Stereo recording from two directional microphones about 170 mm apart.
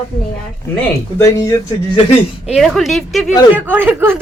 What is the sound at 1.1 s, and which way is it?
Speech, 20° left (ahead or behind).